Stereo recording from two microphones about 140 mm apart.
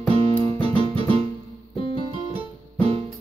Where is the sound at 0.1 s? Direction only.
40° right (ahead or behind).